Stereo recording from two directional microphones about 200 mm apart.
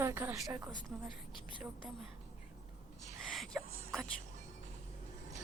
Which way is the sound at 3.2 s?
Centre (ahead or behind).